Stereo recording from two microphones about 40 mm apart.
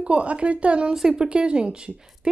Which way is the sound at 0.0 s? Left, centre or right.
Right.